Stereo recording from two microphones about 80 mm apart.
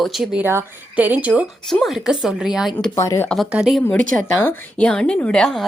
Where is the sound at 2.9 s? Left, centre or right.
Left.